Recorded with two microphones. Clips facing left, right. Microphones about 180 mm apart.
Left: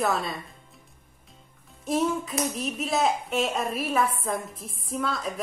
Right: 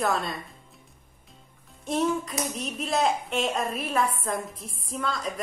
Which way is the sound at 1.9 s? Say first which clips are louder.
Even; centre (ahead or behind).